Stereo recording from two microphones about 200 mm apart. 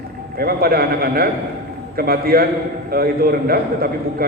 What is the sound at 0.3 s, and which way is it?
A man's voice, 50° right (ahead or behind).